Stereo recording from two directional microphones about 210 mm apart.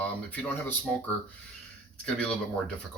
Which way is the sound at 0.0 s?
10° left (ahead or behind).